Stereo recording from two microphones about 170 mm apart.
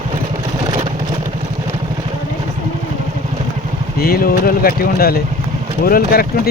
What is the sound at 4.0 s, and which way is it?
Speech, 60° left (ahead or behind).